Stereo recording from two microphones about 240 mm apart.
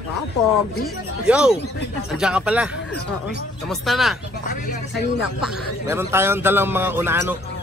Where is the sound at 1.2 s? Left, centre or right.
Centre.